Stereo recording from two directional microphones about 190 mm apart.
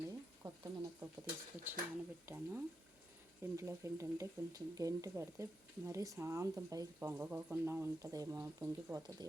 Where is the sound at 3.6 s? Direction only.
15° right (ahead or behind).